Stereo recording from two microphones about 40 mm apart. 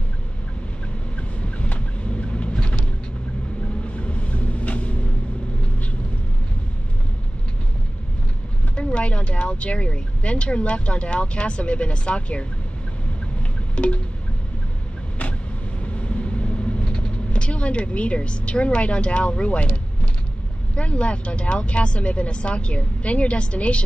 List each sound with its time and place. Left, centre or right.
1.4 s vehicle: left
8.7 s speech: left
13.4 s wind chime: left
15.8 s vehicle: left
20.7 s speech: left